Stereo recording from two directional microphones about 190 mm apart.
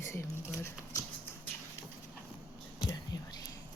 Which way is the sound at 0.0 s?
15° left (ahead or behind).